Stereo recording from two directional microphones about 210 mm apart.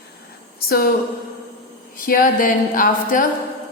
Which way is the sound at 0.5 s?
45° left (ahead or behind).